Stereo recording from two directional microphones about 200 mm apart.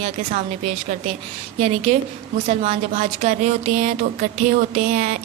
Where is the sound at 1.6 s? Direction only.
30° right (ahead or behind).